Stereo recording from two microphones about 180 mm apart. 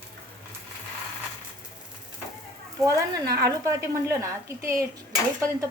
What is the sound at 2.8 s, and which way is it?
A woman's voice, 20° right (ahead or behind).